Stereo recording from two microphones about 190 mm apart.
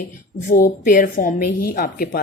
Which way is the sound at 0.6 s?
45° left (ahead or behind).